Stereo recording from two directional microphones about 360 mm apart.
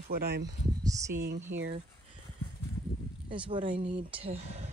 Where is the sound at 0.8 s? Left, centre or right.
Centre.